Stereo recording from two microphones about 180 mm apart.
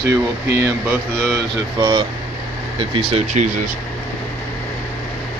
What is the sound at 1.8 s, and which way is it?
Speech, 25° right (ahead or behind).